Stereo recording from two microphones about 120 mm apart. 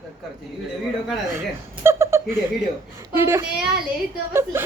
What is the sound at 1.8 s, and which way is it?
A woman's voice, 20° right (ahead or behind).